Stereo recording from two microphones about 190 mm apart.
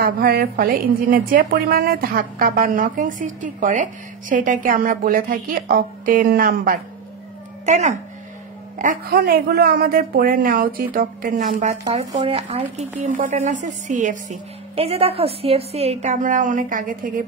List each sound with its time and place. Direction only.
0.0 s a woman's voice: 55° right (ahead or behind)
12.1 s a woman's voice: 30° right (ahead or behind); by 17.3 s 45° right (ahead or behind)